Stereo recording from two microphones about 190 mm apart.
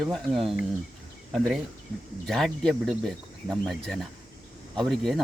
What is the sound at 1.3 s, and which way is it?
Speech, centre (ahead or behind).